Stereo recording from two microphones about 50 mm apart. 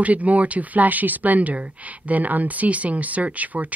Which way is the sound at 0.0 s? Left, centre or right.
Right.